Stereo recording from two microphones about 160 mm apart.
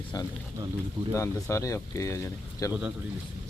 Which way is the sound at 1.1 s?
20° left (ahead or behind).